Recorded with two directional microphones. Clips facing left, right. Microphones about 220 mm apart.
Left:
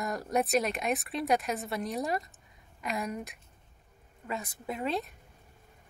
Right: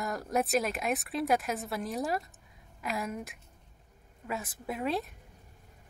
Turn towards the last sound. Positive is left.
turn(degrees=0)  # may be behind; listen again after turning